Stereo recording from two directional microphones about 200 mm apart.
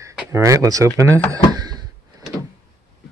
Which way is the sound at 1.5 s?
20° right (ahead or behind).